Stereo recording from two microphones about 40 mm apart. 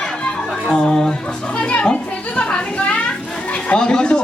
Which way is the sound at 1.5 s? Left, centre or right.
Left.